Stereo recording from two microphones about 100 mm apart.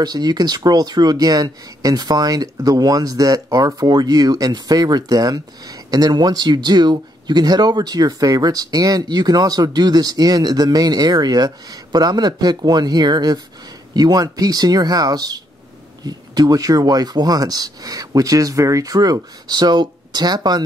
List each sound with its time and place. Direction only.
0.0 s speech: 45° right (ahead or behind)